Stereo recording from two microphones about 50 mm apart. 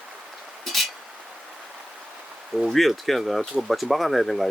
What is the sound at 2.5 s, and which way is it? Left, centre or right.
Speech, centre.